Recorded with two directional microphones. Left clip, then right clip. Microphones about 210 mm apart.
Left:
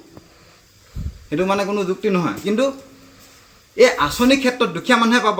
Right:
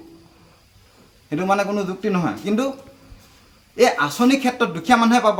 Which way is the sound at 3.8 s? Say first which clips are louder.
Left 3 dB; 20° right (ahead or behind).